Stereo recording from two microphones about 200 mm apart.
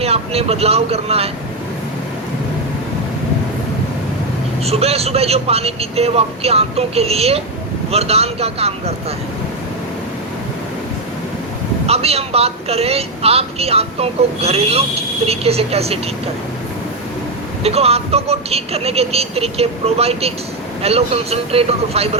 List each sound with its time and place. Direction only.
0.0 s speech: 30° right (ahead or behind)
4.6 s speech: 30° right (ahead or behind)
11.9 s speech: 30° right (ahead or behind)
17.6 s speech: 30° right (ahead or behind)